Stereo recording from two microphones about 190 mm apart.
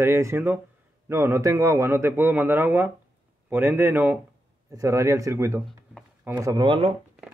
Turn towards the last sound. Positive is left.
turn(degrees=-25)  # may be behind; listen again after turning